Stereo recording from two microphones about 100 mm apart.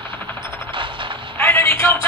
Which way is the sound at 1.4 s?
25° left (ahead or behind).